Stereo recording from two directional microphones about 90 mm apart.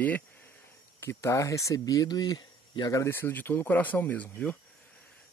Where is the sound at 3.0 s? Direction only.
25° left (ahead or behind).